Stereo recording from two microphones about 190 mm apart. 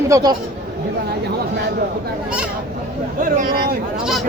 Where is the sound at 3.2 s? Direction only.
50° right (ahead or behind).